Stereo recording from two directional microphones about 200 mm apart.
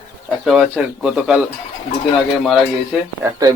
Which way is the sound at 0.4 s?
5° right (ahead or behind).